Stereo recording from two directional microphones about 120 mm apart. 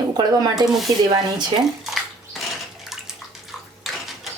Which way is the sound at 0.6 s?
Centre (ahead or behind).